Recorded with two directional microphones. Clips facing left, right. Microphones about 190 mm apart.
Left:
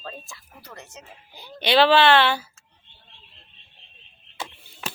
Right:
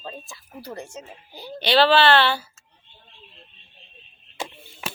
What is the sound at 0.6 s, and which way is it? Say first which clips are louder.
Speech: right 9 dB; 30° right (ahead or behind).